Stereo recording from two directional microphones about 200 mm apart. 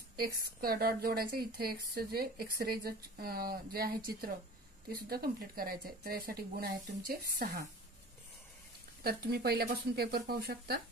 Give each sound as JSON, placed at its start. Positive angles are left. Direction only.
{"t": 0.1, "sound": "a woman's voice", "side_deg": -50}
{"t": 9.0, "sound": "a woman's voice", "side_deg": -50}